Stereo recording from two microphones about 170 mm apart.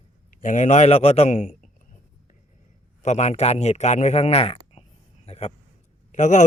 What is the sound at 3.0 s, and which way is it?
A man's voice, 40° left (ahead or behind).